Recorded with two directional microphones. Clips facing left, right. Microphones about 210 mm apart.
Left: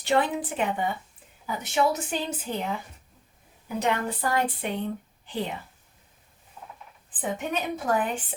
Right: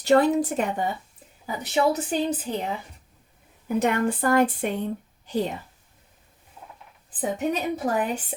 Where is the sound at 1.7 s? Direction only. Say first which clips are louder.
Right 3 dB; 35° right (ahead or behind).